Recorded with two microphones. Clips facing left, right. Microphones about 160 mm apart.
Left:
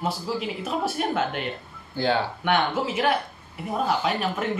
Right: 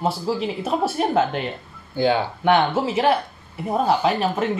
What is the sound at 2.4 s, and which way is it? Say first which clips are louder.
Speech: right 5 dB; 30° right (ahead or behind).